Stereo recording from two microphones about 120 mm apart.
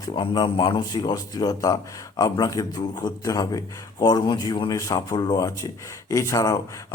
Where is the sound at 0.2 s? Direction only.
45° left (ahead or behind).